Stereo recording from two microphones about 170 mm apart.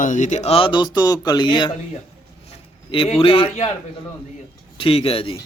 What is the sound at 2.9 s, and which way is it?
Speech, 30° left (ahead or behind).